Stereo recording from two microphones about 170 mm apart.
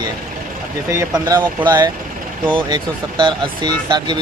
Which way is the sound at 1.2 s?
25° right (ahead or behind).